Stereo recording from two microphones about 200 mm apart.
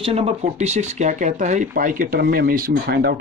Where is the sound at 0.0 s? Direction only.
30° right (ahead or behind).